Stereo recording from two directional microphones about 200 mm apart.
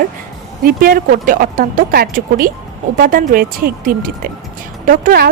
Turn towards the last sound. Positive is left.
turn(degrees=-45)  # may be behind; listen again after turning